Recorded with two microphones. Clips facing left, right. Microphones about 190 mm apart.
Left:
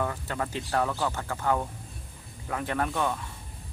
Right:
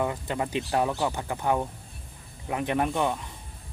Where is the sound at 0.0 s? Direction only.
15° right (ahead or behind).